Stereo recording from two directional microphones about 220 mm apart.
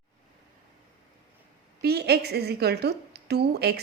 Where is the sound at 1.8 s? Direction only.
45° right (ahead or behind).